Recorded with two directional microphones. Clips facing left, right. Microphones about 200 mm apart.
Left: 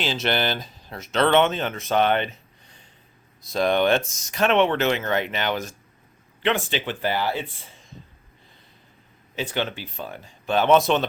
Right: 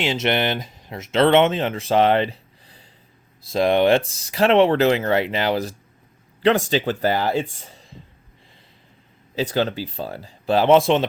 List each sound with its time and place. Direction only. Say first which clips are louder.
0.0 s a man's voice: right 3 dB; 25° right (ahead or behind)
9.3 s speech: right 6 dB; 35° right (ahead or behind)